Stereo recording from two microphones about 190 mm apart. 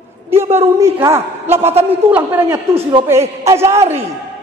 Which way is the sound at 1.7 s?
30° right (ahead or behind).